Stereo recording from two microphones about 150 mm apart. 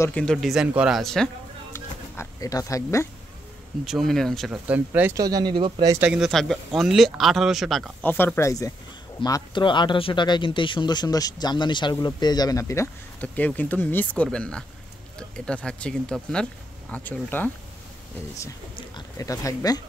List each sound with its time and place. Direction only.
0.1 s speech: 5° left (ahead or behind)
1.7 s a sound: 20° left (ahead or behind)
3.8 s speech: centre (ahead or behind)
4.6 s speech: 10° right (ahead or behind)
5.1 s speech: 25° right (ahead or behind)
5.9 s speech: 5° right (ahead or behind)
8.0 s speech: 10° left (ahead or behind)
18.8 s speech: 25° left (ahead or behind)